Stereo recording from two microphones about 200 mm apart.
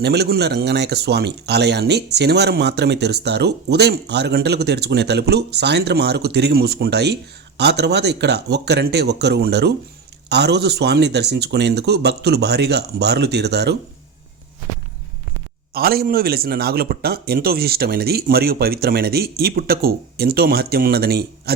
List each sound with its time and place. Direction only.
0.0 s speech: 55° right (ahead or behind)
15.7 s a man's voice: 50° right (ahead or behind)